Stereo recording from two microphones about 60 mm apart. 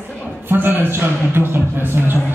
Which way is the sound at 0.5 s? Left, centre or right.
Right.